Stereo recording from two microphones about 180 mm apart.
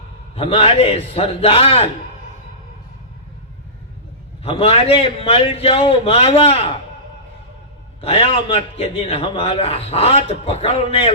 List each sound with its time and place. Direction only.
0.3 s a man's voice: 30° left (ahead or behind)
4.4 s a man's voice: 30° left (ahead or behind)
8.0 s a man's voice: 35° left (ahead or behind)